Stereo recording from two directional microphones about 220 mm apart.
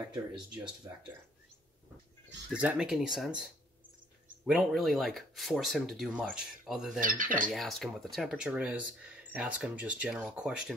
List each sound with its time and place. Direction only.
2.5 s speech: 5° right (ahead or behind)
7.0 s speech: 35° right (ahead or behind)
7.5 s speech: centre (ahead or behind)